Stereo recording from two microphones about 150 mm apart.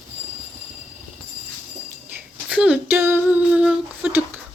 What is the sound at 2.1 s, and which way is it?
Female singing, 10° right (ahead or behind).